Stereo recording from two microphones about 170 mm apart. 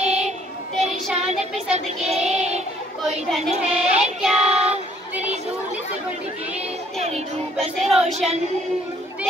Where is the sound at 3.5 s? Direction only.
40° right (ahead or behind).